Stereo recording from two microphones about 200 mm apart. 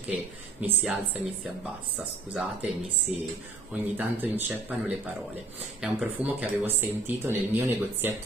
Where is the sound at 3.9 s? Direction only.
10° right (ahead or behind).